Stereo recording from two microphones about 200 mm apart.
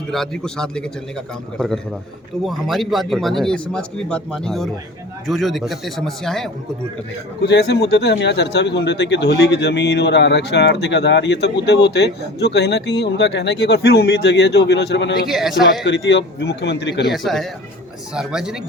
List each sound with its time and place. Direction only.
0.1 s speech: 5° left (ahead or behind)
7.4 s speech: 60° left (ahead or behind)
15.3 s speech: centre (ahead or behind)
15.8 s speech: 60° left (ahead or behind)
17.1 s speech: centre (ahead or behind)